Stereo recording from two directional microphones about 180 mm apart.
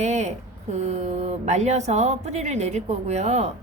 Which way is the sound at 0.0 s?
40° right (ahead or behind).